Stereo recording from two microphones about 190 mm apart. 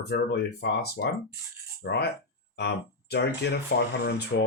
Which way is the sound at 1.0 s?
70° left (ahead or behind).